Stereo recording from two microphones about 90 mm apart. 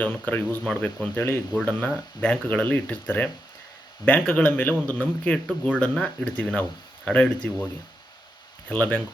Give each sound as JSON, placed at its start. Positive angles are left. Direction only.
{"t": 0.0, "sound": "speech", "side_deg": 20}
{"t": 1.1, "sound": "speech", "side_deg": 30}
{"t": 1.5, "sound": "speech", "side_deg": 15}
{"t": 8.7, "sound": "speech", "side_deg": 15}